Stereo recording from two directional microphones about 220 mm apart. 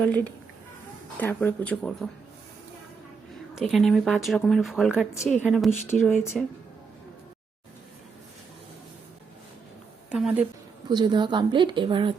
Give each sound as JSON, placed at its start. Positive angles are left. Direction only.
{"t": 0.0, "sound": "speech", "side_deg": 5}
{"t": 3.5, "sound": "speech", "side_deg": 0}
{"t": 5.8, "sound": "speech", "side_deg": 10}
{"t": 6.3, "sound": "speech", "side_deg": 0}
{"t": 10.1, "sound": "speech", "side_deg": -5}
{"t": 10.8, "sound": "speech", "side_deg": -20}